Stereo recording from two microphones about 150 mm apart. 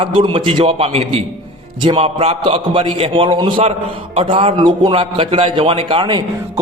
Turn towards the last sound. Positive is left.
turn(degrees=-30)  # may be behind; listen again after turning